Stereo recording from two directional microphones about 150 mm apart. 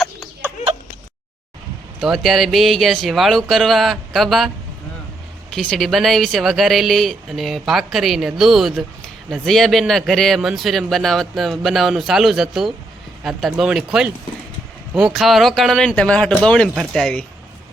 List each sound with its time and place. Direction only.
2.0 s speech: centre (ahead or behind)